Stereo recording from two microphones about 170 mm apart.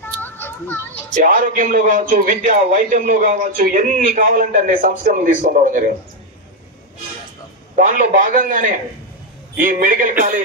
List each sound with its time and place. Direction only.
0.0 s a sound: 10° left (ahead or behind)
1.1 s a man's voice: 50° right (ahead or behind)
7.7 s a man's voice: 50° right (ahead or behind)